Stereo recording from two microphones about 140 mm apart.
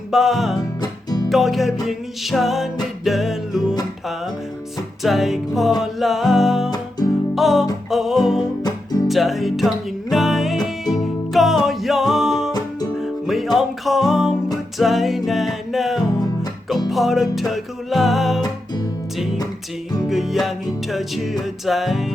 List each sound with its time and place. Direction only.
0.1 s music: centre (ahead or behind)
0.8 s music: 30° left (ahead or behind)
1.3 s music: centre (ahead or behind)
5.0 s music: centre (ahead or behind)
12.5 s music: 30° left (ahead or behind)
13.0 s music: centre (ahead or behind)
20.1 s music: centre (ahead or behind)
21.7 s music: centre (ahead or behind)